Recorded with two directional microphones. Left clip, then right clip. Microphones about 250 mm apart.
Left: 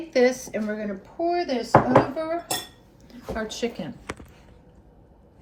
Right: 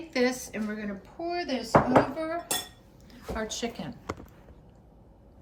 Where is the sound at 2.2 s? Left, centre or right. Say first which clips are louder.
Left 4 dB; centre.